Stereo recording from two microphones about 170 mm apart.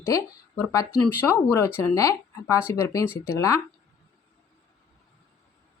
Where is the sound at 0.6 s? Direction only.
20° left (ahead or behind).